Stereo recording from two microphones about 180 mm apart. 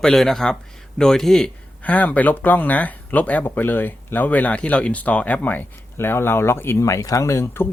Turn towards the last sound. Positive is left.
turn(degrees=15)  # may be behind; listen again after turning